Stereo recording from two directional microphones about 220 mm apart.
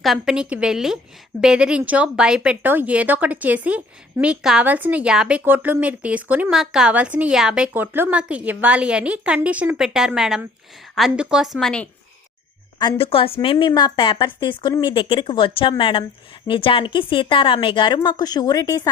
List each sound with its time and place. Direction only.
0.0 s a woman's voice: centre (ahead or behind)
12.8 s a woman's voice: 25° left (ahead or behind)